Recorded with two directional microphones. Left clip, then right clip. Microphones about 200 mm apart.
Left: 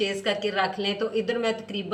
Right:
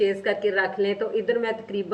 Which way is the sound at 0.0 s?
20° right (ahead or behind).